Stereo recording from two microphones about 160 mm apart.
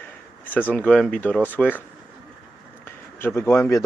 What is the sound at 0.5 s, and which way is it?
Speech, 10° left (ahead or behind).